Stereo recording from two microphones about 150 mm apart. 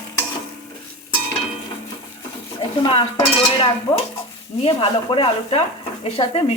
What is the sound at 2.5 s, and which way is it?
Dishes, 30° left (ahead or behind).